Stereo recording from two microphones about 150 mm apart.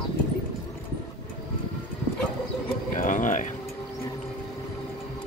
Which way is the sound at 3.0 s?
60° left (ahead or behind).